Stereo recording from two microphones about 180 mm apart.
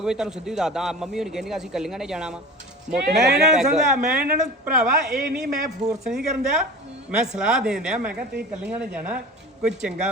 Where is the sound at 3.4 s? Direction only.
Centre (ahead or behind).